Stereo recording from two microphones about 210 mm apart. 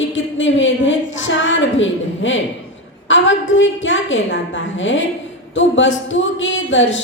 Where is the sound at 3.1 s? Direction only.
65° left (ahead or behind).